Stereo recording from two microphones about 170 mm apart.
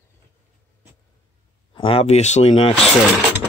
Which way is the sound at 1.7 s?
35° left (ahead or behind).